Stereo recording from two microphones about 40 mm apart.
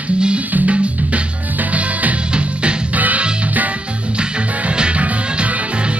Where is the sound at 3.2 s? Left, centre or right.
Right.